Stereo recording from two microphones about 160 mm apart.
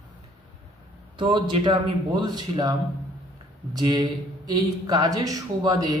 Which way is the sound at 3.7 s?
25° right (ahead or behind).